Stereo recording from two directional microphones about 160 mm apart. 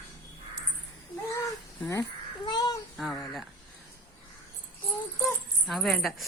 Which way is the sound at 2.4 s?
25° left (ahead or behind).